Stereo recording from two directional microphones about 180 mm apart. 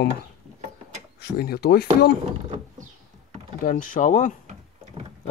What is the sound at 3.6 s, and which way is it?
Speech, 50° left (ahead or behind).